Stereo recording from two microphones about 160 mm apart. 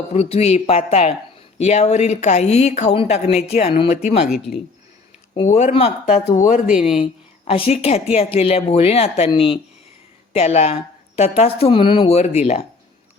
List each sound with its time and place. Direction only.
0.1 s speech: 40° left (ahead or behind)
5.3 s speech: 40° left (ahead or behind)
6.7 s speech: 5° right (ahead or behind)
7.0 s speech: 35° left (ahead or behind)
10.3 s speech: 45° left (ahead or behind)